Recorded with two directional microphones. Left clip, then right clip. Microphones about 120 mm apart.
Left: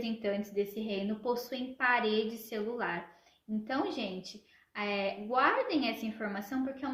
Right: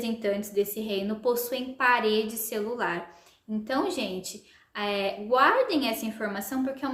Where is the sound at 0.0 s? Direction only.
35° right (ahead or behind).